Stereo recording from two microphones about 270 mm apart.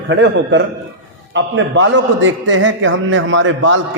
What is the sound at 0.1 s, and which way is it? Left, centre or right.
A man's voice, right.